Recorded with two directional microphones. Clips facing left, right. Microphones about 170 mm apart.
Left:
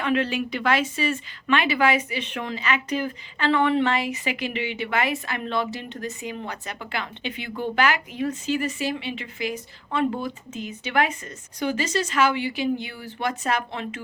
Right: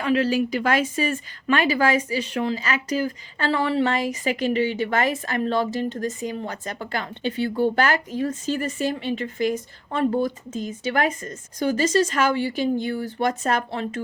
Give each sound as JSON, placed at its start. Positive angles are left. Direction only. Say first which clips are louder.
{"t": 0.0, "sound": "a woman's voice", "louder": "right 3 dB", "side_deg": -35}